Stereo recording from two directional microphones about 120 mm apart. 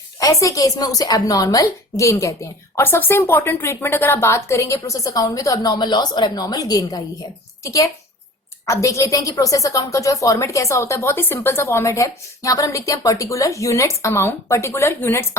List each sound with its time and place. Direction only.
0.2 s a woman's voice: 25° left (ahead or behind)